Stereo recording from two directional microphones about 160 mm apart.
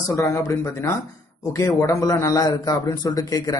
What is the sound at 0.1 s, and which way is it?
A man's voice, 20° left (ahead or behind).